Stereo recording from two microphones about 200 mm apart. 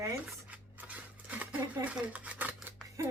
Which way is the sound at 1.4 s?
5° right (ahead or behind).